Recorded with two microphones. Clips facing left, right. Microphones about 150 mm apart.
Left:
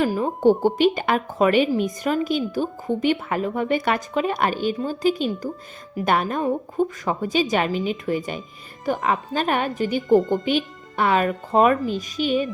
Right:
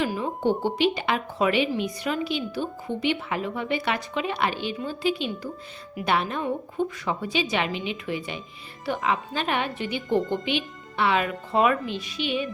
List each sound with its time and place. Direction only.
0.0 s speech: 45° left (ahead or behind)